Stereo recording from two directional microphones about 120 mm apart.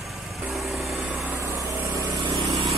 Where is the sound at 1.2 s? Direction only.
25° right (ahead or behind).